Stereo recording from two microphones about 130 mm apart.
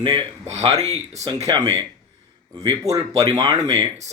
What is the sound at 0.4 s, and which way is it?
Speech, 55° right (ahead or behind).